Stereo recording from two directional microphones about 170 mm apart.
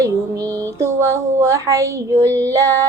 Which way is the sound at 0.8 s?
15° right (ahead or behind).